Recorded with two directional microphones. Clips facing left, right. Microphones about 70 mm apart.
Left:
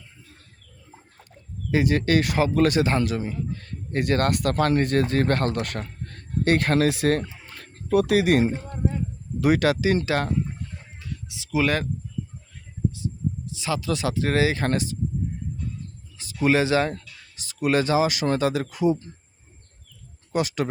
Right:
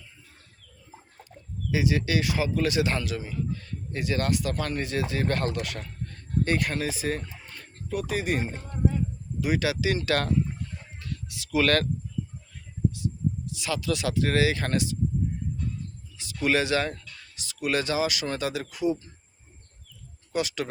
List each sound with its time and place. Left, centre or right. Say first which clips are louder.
1.7 s speech: left 5 dB; left
3.9 s speech: left 5 dB; left
6.1 s speech: left 5 dB; left
9.4 s speech: left 6 dB; left
9.6 s speech: left 6 dB; left
10.1 s speech: left 1 dB; left
11.0 s a sound: even; centre
12.9 s speech: even; left
16.1 s speech: left 4 dB; left
20.3 s speech: left 4 dB; left